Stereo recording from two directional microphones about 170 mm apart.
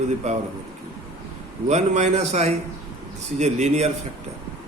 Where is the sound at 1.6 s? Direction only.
40° right (ahead or behind).